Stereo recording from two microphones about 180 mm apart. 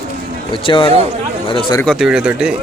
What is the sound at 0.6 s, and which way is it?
Speech, 30° left (ahead or behind).